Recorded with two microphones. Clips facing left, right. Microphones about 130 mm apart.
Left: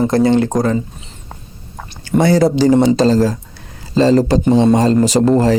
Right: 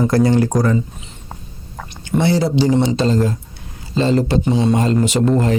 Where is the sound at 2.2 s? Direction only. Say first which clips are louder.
Left 4 dB; 45° left (ahead or behind).